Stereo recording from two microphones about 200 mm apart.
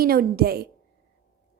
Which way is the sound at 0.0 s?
50° right (ahead or behind).